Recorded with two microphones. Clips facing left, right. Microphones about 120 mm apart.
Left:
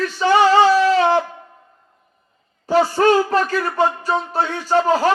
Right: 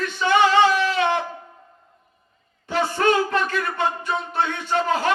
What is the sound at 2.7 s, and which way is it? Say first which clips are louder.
A man's voice: left 6 dB; 35° left (ahead or behind).